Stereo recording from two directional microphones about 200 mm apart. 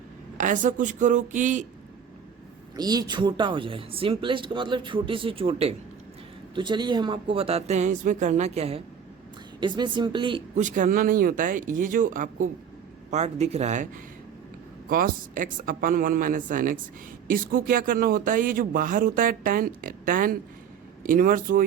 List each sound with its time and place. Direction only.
0.3 s speech: 40° right (ahead or behind)
2.7 s speech: 20° right (ahead or behind)
10.6 s speech: 40° right (ahead or behind)
14.8 s speech: 45° right (ahead or behind)